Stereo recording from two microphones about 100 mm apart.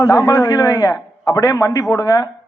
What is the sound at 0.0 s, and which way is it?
A man's voice, 35° left (ahead or behind).